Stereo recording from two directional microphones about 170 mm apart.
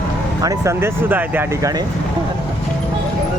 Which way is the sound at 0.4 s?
20° right (ahead or behind).